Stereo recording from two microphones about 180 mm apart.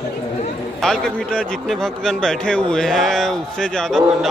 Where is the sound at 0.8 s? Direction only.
5° left (ahead or behind).